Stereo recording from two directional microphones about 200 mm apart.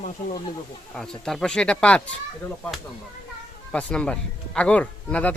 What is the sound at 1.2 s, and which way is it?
Speech, centre (ahead or behind).